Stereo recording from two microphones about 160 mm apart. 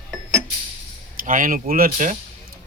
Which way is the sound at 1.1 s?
60° right (ahead or behind).